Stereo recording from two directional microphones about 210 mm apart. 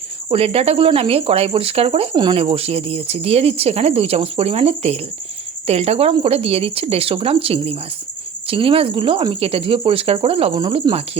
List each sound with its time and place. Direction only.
0.3 s speech: 30° right (ahead or behind)